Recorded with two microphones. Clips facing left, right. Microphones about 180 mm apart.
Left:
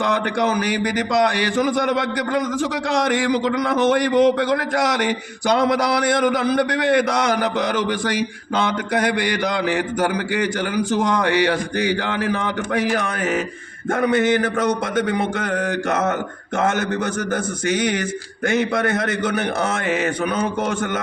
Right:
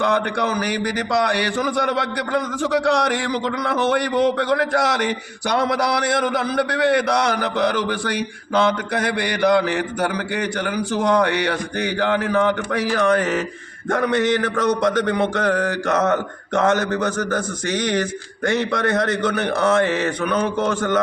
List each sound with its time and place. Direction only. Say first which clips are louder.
1.5 s a man's voice: left 2 dB; 20° left (ahead or behind)
3.7 s a man's voice: left 2 dB; 20° left (ahead or behind)
6.2 s a man's voice: left 3 dB; 20° left (ahead or behind)
17.7 s a man's voice: left 3 dB; 5° left (ahead or behind)